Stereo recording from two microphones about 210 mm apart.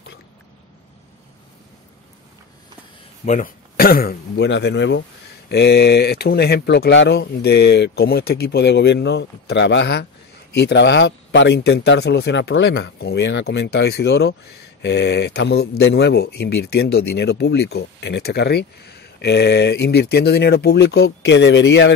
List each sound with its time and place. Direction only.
3.3 s speech: 40° left (ahead or behind); by 21.9 s 55° left (ahead or behind)